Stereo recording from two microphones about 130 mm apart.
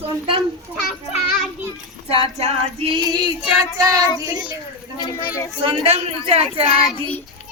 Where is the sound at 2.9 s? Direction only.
30° right (ahead or behind).